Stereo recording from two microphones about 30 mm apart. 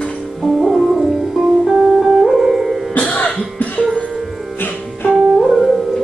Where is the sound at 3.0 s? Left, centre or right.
Left.